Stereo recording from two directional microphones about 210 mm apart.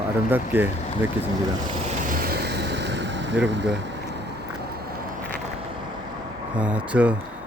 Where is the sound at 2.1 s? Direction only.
45° right (ahead or behind).